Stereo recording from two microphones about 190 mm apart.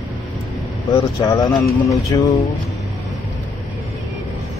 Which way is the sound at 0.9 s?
20° left (ahead or behind).